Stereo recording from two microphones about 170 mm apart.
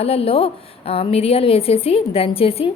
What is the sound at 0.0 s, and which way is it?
A woman's voice, 35° left (ahead or behind).